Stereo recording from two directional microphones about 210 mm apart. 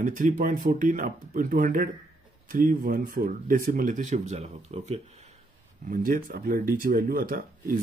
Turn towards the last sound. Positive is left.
turn(degrees=-45)  # may be behind; listen again after turning